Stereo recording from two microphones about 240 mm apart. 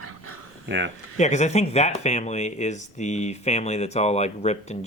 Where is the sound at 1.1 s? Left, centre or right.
Left.